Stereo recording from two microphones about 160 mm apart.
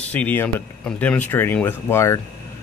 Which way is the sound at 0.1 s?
10° left (ahead or behind).